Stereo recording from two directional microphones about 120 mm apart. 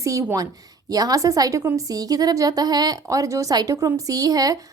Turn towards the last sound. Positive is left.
turn(degrees=-30)  # may be behind; listen again after turning